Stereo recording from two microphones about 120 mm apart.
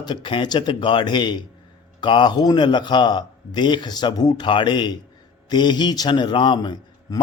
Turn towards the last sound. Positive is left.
turn(degrees=40)  # may be behind; listen again after turning